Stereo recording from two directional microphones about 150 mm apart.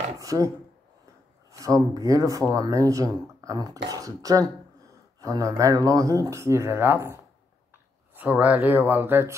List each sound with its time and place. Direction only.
0.2 s speech: 20° right (ahead or behind)
1.5 s speech: 20° right (ahead or behind)